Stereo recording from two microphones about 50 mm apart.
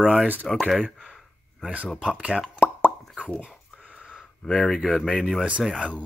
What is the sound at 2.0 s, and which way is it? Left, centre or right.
Speech, centre.